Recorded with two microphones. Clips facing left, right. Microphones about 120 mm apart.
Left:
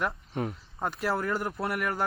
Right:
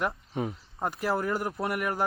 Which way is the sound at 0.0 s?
5° right (ahead or behind).